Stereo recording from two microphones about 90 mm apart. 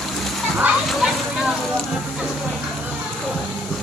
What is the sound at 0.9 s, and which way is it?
Speech, centre (ahead or behind).